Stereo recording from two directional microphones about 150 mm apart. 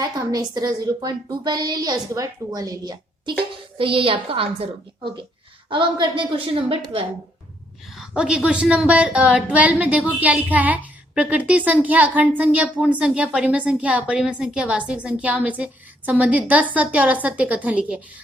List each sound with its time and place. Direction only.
0.0 s a woman's voice: 25° right (ahead or behind)
7.9 s a woman's voice: 5° right (ahead or behind)